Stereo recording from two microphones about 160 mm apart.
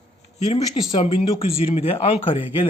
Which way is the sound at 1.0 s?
35° left (ahead or behind).